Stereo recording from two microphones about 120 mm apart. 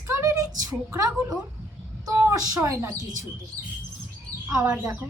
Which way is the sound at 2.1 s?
30° right (ahead or behind).